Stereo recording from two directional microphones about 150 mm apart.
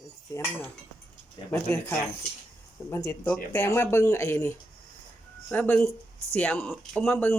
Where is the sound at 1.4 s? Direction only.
30° left (ahead or behind).